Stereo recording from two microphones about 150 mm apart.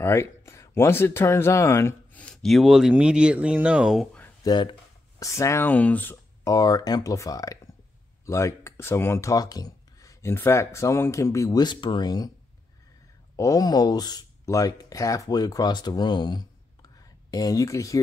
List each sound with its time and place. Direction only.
0.0 s speech: 15° left (ahead or behind)
2.2 s speech: centre (ahead or behind)
4.4 s speech: 30° left (ahead or behind); by 6.1 s 10° left (ahead or behind)
6.4 s speech: 25° left (ahead or behind)
13.4 s speech: 25° left (ahead or behind)